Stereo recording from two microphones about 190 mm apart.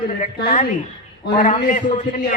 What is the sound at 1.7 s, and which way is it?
Speech, 40° left (ahead or behind).